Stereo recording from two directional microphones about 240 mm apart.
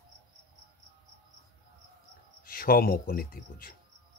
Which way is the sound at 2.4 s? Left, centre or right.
Left.